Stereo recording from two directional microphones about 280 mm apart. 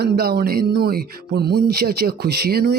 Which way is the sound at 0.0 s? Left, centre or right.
Right.